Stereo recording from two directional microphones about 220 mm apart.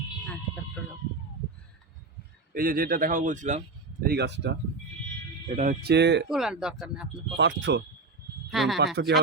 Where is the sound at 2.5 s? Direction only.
40° right (ahead or behind).